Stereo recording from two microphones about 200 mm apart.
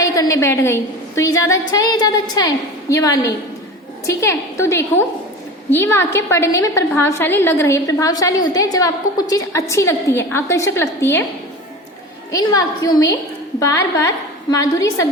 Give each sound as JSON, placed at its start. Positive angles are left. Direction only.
{"t": 0.0, "sound": "a woman's voice", "side_deg": 15}
{"t": 12.3, "sound": "a woman's voice", "side_deg": 15}